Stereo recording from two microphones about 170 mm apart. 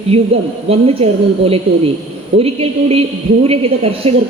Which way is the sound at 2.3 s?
35° right (ahead or behind).